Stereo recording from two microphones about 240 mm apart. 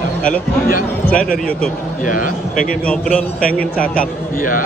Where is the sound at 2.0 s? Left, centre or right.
Left.